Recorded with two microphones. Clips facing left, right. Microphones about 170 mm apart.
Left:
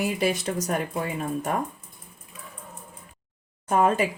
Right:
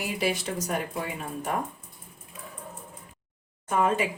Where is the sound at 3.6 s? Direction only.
40° left (ahead or behind).